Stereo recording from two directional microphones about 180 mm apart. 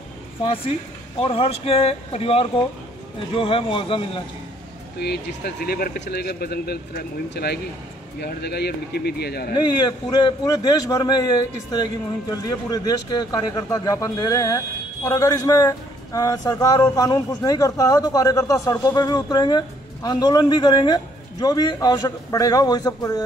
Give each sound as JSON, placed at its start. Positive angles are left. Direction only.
{"t": 1.2, "sound": "a man's voice", "side_deg": 30}
{"t": 4.9, "sound": "speech", "side_deg": 65}
{"t": 9.8, "sound": "a man's voice", "side_deg": 20}